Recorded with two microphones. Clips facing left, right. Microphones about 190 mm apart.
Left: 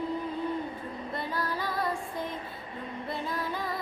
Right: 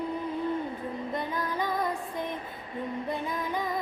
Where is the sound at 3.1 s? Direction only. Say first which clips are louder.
Left 1 dB; 15° right (ahead or behind).